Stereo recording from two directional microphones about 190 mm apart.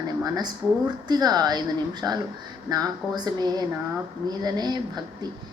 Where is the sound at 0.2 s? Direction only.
20° right (ahead or behind).